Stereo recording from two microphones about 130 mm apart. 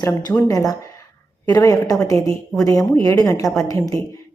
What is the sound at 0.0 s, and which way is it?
A woman's voice, 30° left (ahead or behind).